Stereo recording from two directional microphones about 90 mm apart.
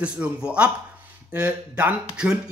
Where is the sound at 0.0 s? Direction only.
15° right (ahead or behind).